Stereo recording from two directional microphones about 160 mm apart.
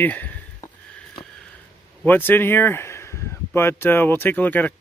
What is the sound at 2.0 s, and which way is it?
Speech, 10° left (ahead or behind).